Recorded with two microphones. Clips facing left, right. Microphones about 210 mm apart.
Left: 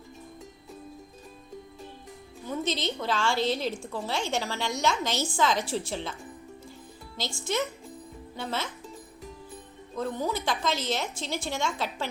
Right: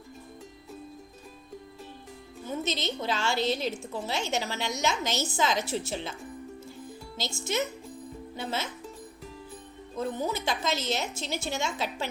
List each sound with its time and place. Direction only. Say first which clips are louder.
2.5 s a woman's voice: left 1 dB; 20° right (ahead or behind)
7.3 s a woman's voice: left 1 dB; 25° right (ahead or behind)
10.2 s a woman's voice: left 1 dB; 25° right (ahead or behind)